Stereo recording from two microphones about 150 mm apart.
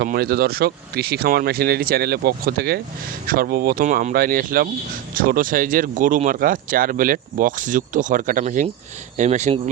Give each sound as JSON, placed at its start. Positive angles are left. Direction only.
{"t": 0.0, "sound": "speech", "side_deg": -90}
{"t": 3.2, "sound": "speech", "side_deg": -75}
{"t": 3.8, "sound": "speech", "side_deg": -65}